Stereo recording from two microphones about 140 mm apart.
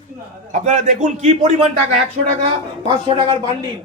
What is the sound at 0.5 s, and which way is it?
A man's voice, 55° right (ahead or behind).